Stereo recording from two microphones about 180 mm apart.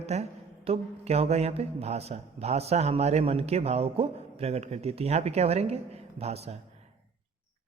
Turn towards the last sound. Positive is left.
turn(degrees=-35)  # may be behind; listen again after turning